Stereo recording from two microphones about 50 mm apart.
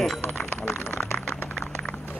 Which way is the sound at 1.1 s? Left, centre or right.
Left.